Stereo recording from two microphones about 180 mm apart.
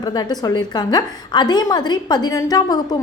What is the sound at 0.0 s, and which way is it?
A woman's voice, 20° left (ahead or behind).